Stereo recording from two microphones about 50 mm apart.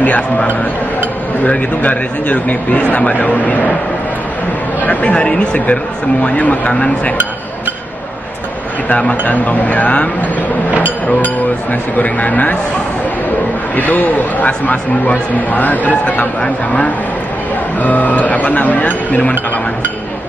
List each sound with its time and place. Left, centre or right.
1.4 s a man's voice: left
4.8 s speech: left
9.2 s a man's voice: left
13.7 s a man's voice: left
16.3 s speech: left
17.7 s a man's voice: left